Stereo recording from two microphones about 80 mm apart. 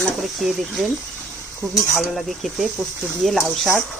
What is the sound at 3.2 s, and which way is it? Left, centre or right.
Speech, centre.